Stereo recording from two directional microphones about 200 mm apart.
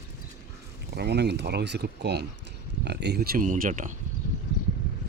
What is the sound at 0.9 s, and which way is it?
Speech, 55° right (ahead or behind).